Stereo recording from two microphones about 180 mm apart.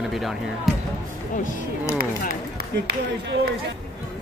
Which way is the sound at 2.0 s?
55° right (ahead or behind).